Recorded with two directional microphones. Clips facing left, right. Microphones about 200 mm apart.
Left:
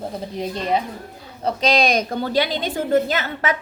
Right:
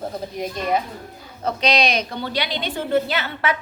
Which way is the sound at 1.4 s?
45° left (ahead or behind).